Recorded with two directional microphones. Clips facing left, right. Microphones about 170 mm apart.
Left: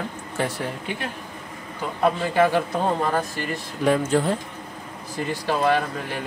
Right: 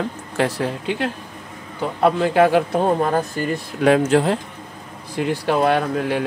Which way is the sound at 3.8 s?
80° right.